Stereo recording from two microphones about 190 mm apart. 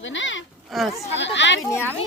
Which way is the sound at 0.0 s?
80° left.